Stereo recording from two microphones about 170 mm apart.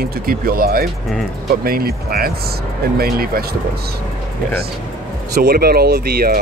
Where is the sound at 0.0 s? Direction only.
60° right (ahead or behind).